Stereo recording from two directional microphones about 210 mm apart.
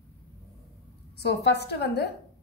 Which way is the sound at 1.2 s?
55° left (ahead or behind).